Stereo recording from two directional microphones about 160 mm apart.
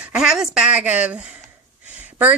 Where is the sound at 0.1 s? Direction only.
5° right (ahead or behind).